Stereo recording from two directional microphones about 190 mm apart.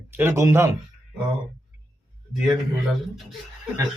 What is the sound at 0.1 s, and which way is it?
Speech, 10° right (ahead or behind).